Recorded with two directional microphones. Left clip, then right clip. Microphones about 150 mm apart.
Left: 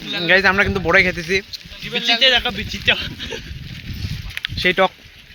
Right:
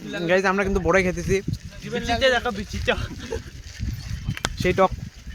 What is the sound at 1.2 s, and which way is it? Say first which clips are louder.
Speech: left 4 dB; 30° right (ahead or behind).